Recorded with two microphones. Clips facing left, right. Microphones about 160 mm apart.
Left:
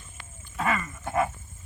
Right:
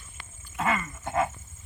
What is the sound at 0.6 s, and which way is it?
Wild animals, 20° right (ahead or behind).